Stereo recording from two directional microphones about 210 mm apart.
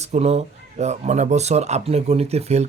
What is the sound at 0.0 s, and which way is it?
Speech, 30° right (ahead or behind).